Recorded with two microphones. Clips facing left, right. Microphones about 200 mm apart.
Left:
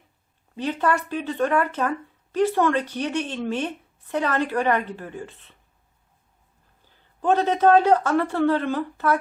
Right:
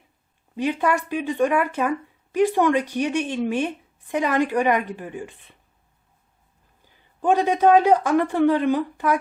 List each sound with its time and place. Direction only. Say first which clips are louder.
0.5 s speech: right 2 dB; 10° right (ahead or behind)
6.8 s speech: right 1 dB; 15° right (ahead or behind)